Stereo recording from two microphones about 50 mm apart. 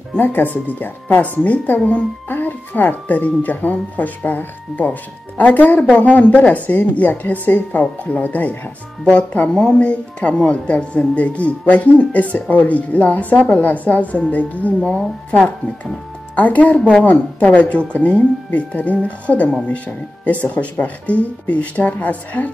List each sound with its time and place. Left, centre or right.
0.1 s a woman's voice: left
16.3 s a woman's voice: left